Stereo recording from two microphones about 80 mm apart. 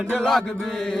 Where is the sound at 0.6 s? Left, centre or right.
Centre.